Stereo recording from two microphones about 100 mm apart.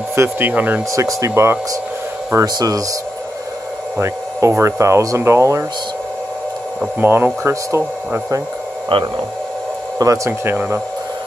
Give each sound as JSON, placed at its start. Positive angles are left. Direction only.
{"t": 0.1, "sound": "speech", "side_deg": -20}
{"t": 0.9, "sound": "speech", "side_deg": -30}
{"t": 2.4, "sound": "speech", "side_deg": -40}
{"t": 4.0, "sound": "speech", "side_deg": -30}
{"t": 7.0, "sound": "speech", "side_deg": -25}
{"t": 8.8, "sound": "speech", "side_deg": -60}
{"t": 9.9, "sound": "speech", "side_deg": -35}